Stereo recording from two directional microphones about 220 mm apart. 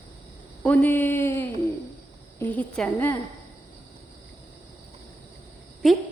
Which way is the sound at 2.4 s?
5° left (ahead or behind).